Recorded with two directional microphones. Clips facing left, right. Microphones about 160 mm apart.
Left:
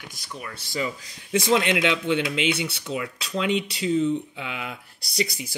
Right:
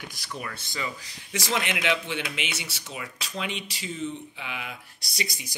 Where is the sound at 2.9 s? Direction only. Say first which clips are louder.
Left 8 dB; 30° left (ahead or behind).